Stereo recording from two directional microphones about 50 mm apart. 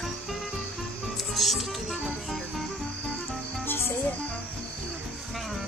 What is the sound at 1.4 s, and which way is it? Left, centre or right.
Music, centre.